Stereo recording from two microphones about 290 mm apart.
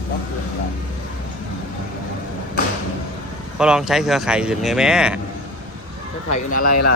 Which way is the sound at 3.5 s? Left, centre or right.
Centre.